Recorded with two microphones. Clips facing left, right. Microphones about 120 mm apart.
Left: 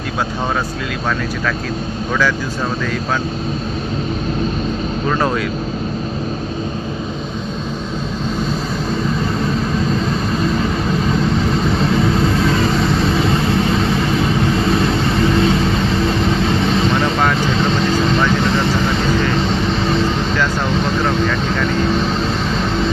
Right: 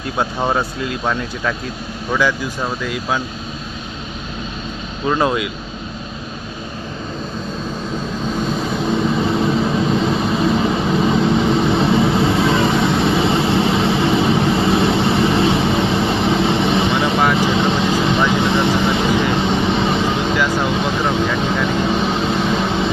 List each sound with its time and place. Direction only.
5.0 s speech: 15° right (ahead or behind)
10.6 s vehicle: 15° right (ahead or behind)